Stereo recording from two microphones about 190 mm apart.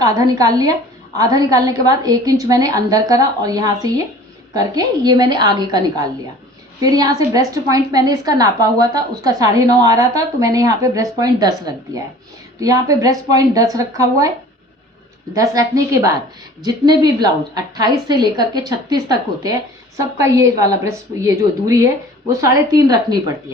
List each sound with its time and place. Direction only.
0.0 s a woman's voice: 20° right (ahead or behind)
15.3 s a woman's voice: 15° right (ahead or behind)